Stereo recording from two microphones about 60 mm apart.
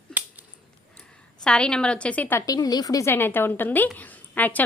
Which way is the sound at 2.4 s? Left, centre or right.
Left.